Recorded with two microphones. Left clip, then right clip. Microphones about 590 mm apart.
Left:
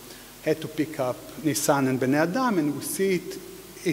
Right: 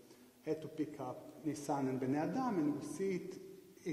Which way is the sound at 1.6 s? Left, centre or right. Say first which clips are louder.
Left 15 dB; left.